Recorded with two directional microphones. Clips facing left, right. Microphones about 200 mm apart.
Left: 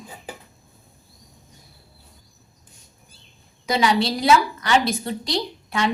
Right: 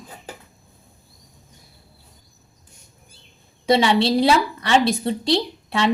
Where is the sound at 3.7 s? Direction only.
30° right (ahead or behind).